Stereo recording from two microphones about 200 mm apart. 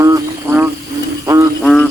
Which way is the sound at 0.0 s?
15° right (ahead or behind).